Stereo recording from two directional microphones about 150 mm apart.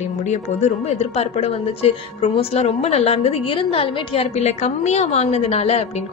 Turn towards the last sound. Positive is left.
turn(degrees=40)  # may be behind; listen again after turning